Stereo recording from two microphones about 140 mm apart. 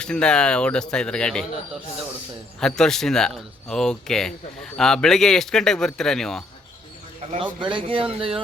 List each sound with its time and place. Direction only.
0.0 s speech: 5° left (ahead or behind)
2.6 s speech: 5° left (ahead or behind)
7.3 s a man's voice: 35° right (ahead or behind)